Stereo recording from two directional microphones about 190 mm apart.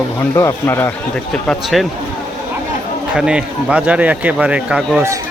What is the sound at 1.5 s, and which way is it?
Speech, centre (ahead or behind).